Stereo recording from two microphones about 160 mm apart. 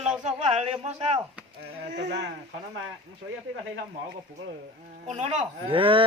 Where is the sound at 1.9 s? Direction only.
90° right.